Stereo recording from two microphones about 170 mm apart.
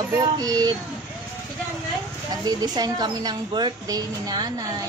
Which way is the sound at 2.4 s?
25° right (ahead or behind).